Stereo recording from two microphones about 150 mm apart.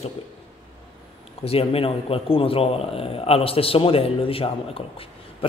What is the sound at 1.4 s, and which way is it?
A man's voice, 40° left (ahead or behind).